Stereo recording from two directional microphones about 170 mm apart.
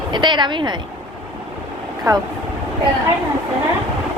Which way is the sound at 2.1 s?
20° right (ahead or behind).